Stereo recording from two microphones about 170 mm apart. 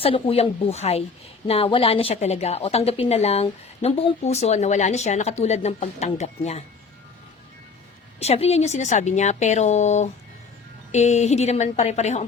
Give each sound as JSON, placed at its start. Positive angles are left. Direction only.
{"t": 0.0, "sound": "a woman's voice", "side_deg": 35}
{"t": 8.2, "sound": "a woman's voice", "side_deg": 40}